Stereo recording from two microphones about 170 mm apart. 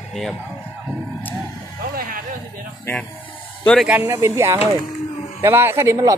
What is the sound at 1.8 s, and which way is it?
Vehicle, 55° right (ahead or behind).